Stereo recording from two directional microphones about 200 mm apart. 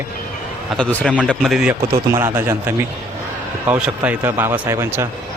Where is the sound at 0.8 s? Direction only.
5° left (ahead or behind); by 5.0 s 15° right (ahead or behind).